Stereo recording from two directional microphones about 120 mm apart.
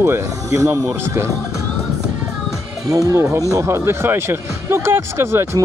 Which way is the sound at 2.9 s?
25° right (ahead or behind).